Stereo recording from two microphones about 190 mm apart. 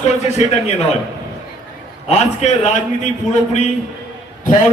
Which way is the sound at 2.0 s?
35° left (ahead or behind).